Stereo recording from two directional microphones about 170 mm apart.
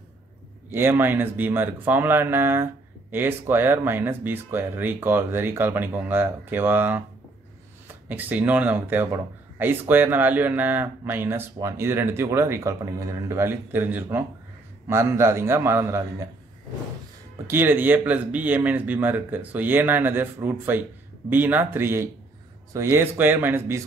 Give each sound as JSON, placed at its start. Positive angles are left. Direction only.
{"t": 0.7, "sound": "speech", "side_deg": -15}
{"t": 17.5, "sound": "speech", "side_deg": -10}